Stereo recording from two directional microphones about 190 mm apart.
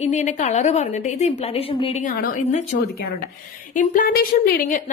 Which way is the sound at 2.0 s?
45° left (ahead or behind).